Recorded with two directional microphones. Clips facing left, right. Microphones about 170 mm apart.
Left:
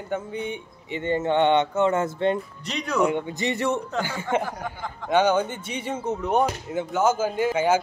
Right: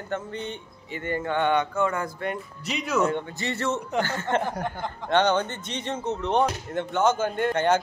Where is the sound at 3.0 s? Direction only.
15° left (ahead or behind).